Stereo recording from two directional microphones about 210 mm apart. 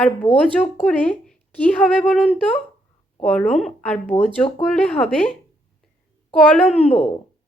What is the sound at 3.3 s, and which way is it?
A woman's voice, 5° left (ahead or behind).